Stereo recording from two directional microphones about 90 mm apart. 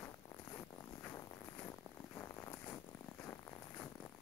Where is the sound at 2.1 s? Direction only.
30° left (ahead or behind).